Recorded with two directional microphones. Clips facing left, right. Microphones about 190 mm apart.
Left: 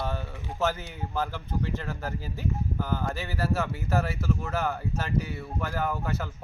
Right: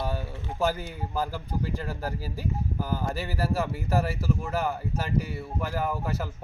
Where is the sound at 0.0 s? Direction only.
10° right (ahead or behind).